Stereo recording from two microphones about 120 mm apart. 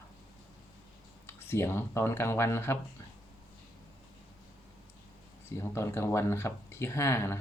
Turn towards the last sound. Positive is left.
turn(degrees=20)  # may be behind; listen again after turning